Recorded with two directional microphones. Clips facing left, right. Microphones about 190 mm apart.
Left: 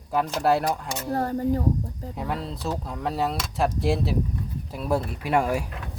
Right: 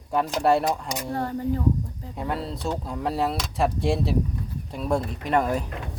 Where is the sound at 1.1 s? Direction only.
40° left (ahead or behind).